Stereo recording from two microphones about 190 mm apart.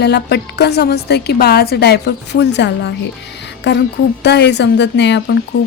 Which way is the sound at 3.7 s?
65° left (ahead or behind).